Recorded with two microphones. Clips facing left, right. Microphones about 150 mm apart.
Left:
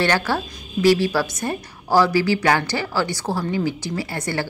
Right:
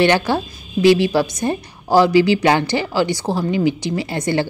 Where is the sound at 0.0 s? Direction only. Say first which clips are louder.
Right 5 dB; 20° right (ahead or behind).